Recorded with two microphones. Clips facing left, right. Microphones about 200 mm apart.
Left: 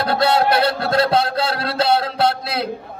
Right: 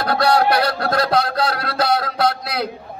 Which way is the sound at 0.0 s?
25° left (ahead or behind).